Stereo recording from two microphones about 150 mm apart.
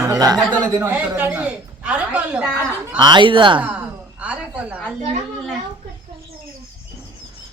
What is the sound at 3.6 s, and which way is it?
A woman's voice, 10° right (ahead or behind).